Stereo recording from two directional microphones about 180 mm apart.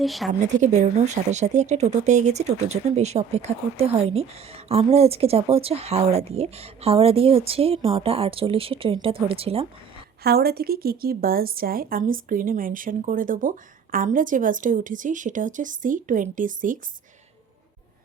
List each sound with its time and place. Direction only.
0.0 s a woman's voice: centre (ahead or behind)
0.6 s speech: 40° right (ahead or behind)
10.2 s speech: 60° right (ahead or behind)